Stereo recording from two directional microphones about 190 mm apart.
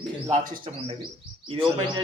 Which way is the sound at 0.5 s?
25° right (ahead or behind).